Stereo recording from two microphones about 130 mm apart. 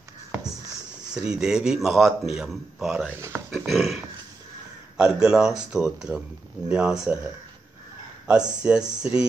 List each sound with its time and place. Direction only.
1.1 s a man's voice: 5° right (ahead or behind)
3.2 s speech: 20° right (ahead or behind)
3.5 s a man's voice: centre (ahead or behind)
8.3 s speech: 5° right (ahead or behind)